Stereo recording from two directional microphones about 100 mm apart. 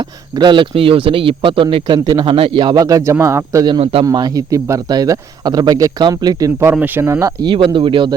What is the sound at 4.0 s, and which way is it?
Speech, 40° right (ahead or behind).